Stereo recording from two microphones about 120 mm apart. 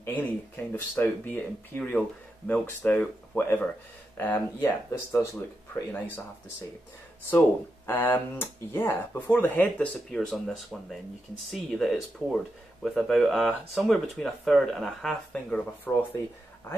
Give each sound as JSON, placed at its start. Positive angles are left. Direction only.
{"t": 0.0, "sound": "speech", "side_deg": 15}
{"t": 7.2, "sound": "speech", "side_deg": 15}
{"t": 10.1, "sound": "speech", "side_deg": 5}
{"t": 15.3, "sound": "speech", "side_deg": 15}